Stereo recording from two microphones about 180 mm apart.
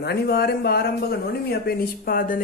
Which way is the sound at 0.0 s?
60° left (ahead or behind).